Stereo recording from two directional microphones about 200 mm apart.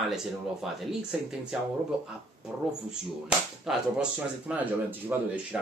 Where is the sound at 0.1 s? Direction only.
Centre (ahead or behind).